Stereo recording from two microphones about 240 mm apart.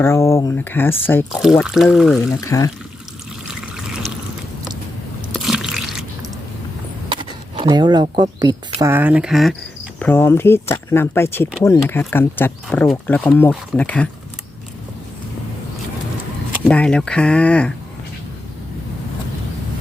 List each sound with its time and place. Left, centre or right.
0.0 s speech: centre
2.3 s speech: centre
3.4 s trickle: centre
5.3 s drip: centre
7.1 s a sound: right
8.1 s speech: centre
16.5 s speech: centre